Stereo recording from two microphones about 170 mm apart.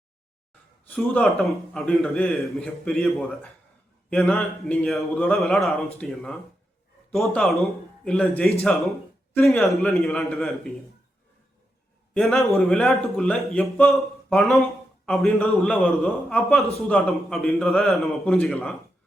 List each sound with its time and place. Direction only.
0.9 s a man's voice: 5° left (ahead or behind)
12.1 s a man's voice: centre (ahead or behind)